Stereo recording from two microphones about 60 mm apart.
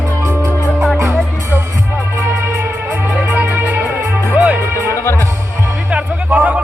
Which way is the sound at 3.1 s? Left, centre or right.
Right.